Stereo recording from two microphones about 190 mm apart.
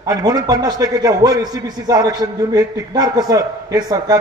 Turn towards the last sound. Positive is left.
turn(degrees=-20)  # may be behind; listen again after turning